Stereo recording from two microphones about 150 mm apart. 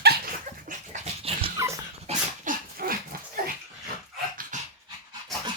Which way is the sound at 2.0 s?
60° right (ahead or behind).